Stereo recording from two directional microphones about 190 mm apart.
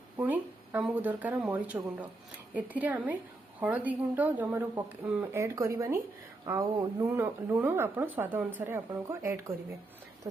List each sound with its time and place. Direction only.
0.2 s speech: 10° right (ahead or behind)